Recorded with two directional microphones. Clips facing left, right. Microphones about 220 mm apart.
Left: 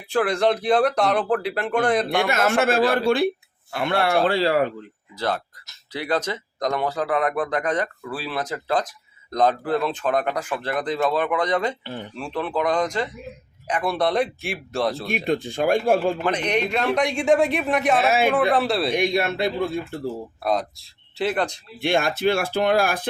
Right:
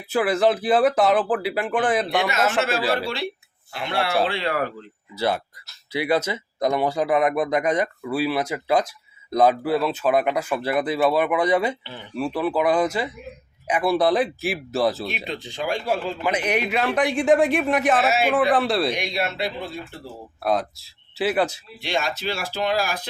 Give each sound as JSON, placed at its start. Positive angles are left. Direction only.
{"t": 0.1, "sound": "speech", "side_deg": -5}
{"t": 2.3, "sound": "speech", "side_deg": 50}
{"t": 4.4, "sound": "speech", "side_deg": 30}
{"t": 5.1, "sound": "speech", "side_deg": -10}
{"t": 11.8, "sound": "speech", "side_deg": 45}
{"t": 12.1, "sound": "speech", "side_deg": -5}
{"t": 15.1, "sound": "speech", "side_deg": 50}
{"t": 16.2, "sound": "speech", "side_deg": -5}
{"t": 18.9, "sound": "speech", "side_deg": 50}
{"t": 20.4, "sound": "speech", "side_deg": 0}
{"t": 21.8, "sound": "speech", "side_deg": 55}